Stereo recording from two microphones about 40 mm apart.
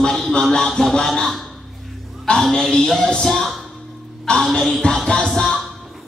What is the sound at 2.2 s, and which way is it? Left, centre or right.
Speech, centre.